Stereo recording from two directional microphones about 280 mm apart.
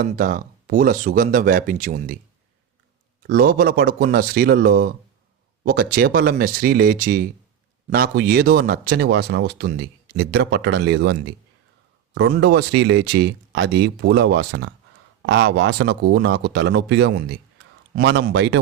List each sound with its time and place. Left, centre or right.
0.0 s speech: right
3.2 s speech: right
12.3 s speech: right